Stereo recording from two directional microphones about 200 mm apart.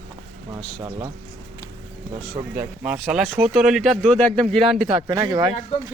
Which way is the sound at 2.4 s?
20° right (ahead or behind).